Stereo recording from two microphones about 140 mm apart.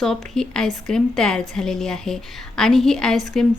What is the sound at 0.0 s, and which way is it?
A woman's voice, 5° left (ahead or behind).